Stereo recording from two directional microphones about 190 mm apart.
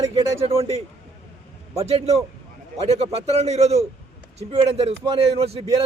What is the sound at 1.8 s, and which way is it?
A man's voice, 35° right (ahead or behind).